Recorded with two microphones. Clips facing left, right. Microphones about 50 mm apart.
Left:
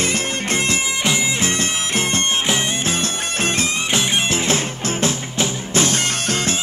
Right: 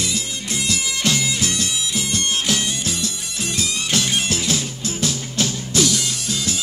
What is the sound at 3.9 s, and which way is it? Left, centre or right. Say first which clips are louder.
Music: left 1 dB; left.